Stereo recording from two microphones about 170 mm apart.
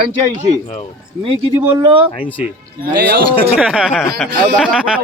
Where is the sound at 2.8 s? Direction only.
65° right (ahead or behind).